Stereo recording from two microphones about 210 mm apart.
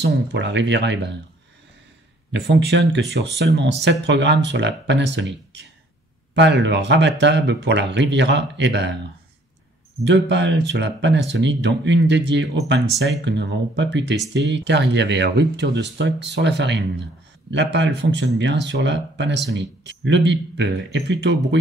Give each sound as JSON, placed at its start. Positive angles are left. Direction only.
{"t": 0.0, "sound": "speech", "side_deg": -55}
{"t": 2.3, "sound": "speech", "side_deg": -50}
{"t": 10.0, "sound": "speech", "side_deg": -55}